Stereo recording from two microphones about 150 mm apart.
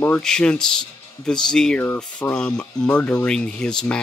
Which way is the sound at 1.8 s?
15° left (ahead or behind).